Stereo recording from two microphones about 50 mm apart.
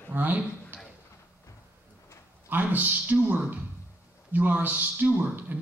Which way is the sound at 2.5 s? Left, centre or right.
Right.